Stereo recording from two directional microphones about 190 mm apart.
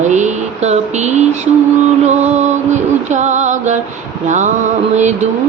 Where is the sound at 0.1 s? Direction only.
40° right (ahead or behind).